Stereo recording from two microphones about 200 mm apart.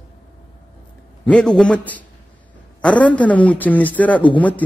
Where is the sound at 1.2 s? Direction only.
5° left (ahead or behind).